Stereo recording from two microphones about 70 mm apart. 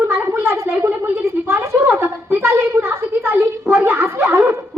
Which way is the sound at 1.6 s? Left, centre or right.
Centre.